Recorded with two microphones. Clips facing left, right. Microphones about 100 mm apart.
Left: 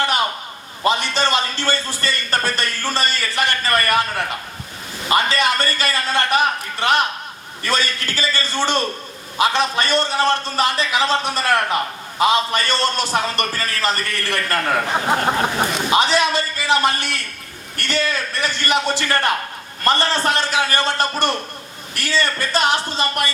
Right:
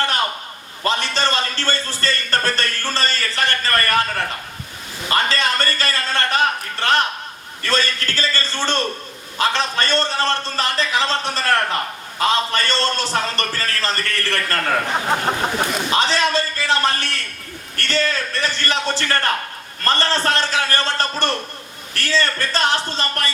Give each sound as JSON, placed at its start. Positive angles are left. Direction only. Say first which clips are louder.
{"t": 0.9, "sound": "a man's voice", "louder": "left 2 dB", "side_deg": 15}
{"t": 5.0, "sound": "a man's voice", "louder": "left 2 dB", "side_deg": 15}